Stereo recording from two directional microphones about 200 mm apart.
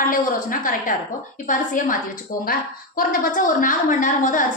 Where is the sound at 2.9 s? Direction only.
45° left (ahead or behind).